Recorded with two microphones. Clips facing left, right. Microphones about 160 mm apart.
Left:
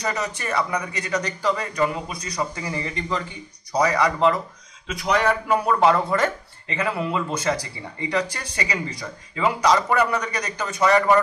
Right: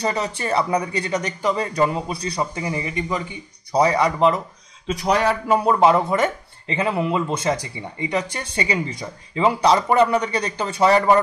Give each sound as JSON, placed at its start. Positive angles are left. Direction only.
{"t": 0.0, "sound": "speech", "side_deg": -30}
{"t": 3.7, "sound": "speech", "side_deg": -25}
{"t": 4.8, "sound": "speech", "side_deg": -35}